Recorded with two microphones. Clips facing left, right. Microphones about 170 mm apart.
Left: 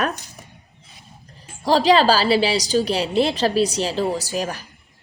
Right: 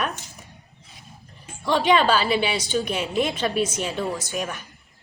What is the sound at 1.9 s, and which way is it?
A woman's voice, 35° left (ahead or behind).